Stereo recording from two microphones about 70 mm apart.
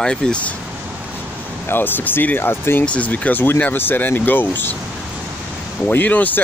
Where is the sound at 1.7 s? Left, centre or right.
Left.